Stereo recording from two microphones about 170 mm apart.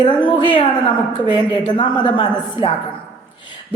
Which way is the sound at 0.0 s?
30° left (ahead or behind).